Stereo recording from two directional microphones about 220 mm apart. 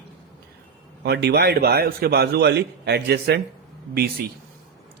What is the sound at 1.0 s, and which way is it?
A man's voice, 50° right (ahead or behind).